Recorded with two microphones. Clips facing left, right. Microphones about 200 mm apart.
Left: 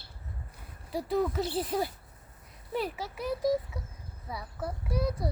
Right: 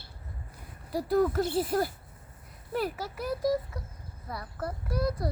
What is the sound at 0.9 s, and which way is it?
Speech, 10° right (ahead or behind).